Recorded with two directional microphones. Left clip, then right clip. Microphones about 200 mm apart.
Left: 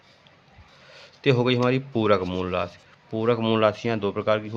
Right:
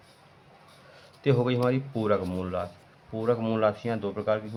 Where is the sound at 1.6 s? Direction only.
40° left (ahead or behind).